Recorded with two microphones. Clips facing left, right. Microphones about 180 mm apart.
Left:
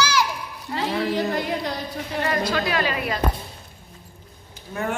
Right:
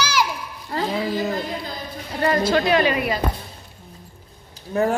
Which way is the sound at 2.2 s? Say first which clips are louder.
Right 6 dB; 30° right (ahead or behind).